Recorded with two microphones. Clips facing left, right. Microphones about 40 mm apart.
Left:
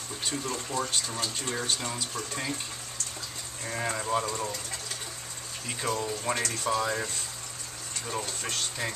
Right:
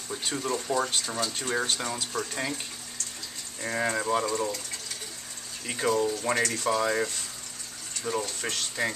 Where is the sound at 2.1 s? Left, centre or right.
Centre.